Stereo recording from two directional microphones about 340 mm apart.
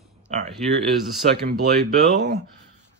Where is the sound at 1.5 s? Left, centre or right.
Right.